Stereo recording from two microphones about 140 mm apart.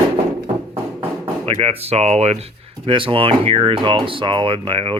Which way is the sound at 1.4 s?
45° right (ahead or behind).